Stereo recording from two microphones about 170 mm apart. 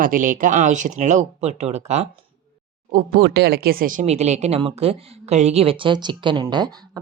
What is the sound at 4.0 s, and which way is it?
A woman's voice, 40° right (ahead or behind).